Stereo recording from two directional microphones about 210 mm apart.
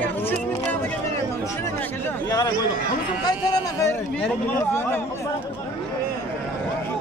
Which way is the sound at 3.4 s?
15° left (ahead or behind).